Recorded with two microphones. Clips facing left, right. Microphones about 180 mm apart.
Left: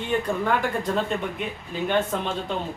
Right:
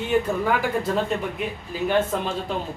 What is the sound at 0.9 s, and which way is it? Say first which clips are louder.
A man's voice: right 1 dB; 5° right (ahead or behind).